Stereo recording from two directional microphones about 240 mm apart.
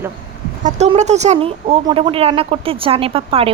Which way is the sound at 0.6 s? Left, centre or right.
Right.